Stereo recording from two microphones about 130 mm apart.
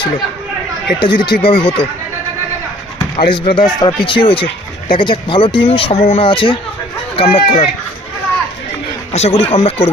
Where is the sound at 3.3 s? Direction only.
40° left (ahead or behind).